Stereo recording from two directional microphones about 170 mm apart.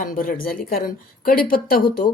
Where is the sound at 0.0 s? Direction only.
55° left (ahead or behind).